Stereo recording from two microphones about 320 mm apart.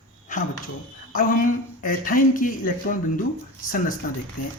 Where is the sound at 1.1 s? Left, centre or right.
Left.